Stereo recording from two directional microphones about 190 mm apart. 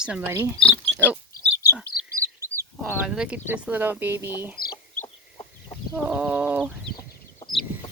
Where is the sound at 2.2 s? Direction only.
15° right (ahead or behind).